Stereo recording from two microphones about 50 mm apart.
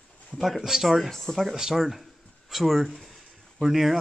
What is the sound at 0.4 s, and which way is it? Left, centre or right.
Speech, centre.